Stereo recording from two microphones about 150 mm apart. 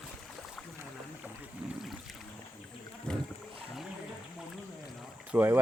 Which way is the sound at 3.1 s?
5° left (ahead or behind).